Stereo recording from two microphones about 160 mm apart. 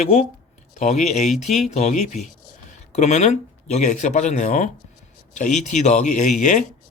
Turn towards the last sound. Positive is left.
turn(degrees=50)  # may be behind; listen again after turning